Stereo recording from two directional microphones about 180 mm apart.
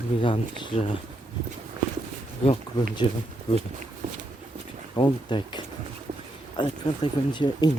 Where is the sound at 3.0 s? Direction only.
30° left (ahead or behind).